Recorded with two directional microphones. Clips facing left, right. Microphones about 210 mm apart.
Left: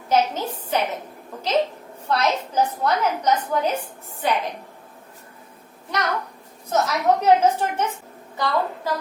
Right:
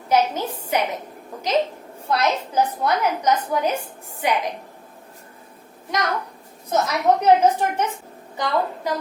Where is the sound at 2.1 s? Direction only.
10° right (ahead or behind).